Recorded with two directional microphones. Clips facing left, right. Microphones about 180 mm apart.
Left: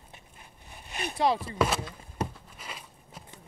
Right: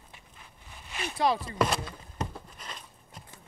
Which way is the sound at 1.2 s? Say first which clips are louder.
Left 1 dB; 20° left (ahead or behind).